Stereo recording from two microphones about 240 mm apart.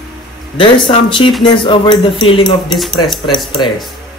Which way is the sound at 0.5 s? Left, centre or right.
Centre.